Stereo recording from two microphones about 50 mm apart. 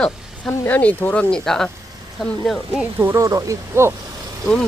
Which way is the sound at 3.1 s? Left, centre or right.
Right.